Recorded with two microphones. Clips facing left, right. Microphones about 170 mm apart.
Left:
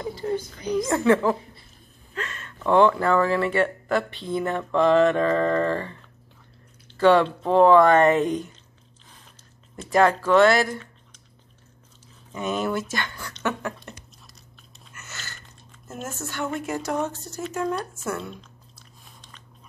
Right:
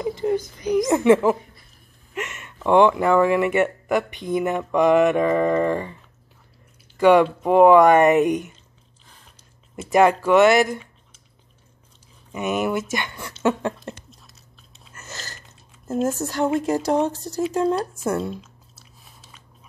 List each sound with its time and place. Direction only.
0.0 s a child's voice: 20° right (ahead or behind)
7.0 s speech: 15° right (ahead or behind)
9.8 s speech: 15° right (ahead or behind)
12.3 s speech: 15° right (ahead or behind)
15.0 s a sound: 35° right (ahead or behind)
15.9 s speech: 35° right (ahead or behind)
18.4 s biting: 5° right (ahead or behind)